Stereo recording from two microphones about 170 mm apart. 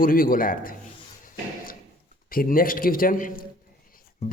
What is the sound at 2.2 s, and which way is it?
A man's voice, 55° left (ahead or behind).